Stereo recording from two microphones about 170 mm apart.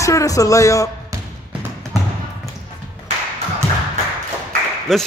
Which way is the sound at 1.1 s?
20° right (ahead or behind).